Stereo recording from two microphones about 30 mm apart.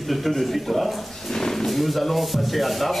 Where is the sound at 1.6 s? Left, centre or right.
Centre.